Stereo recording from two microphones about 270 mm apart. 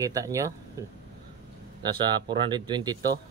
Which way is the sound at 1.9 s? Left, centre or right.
Centre.